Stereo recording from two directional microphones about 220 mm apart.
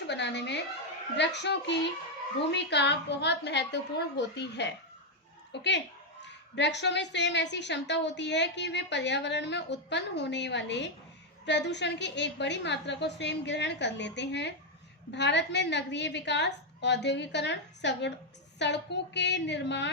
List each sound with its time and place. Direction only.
0.1 s a woman's voice: 50° left (ahead or behind)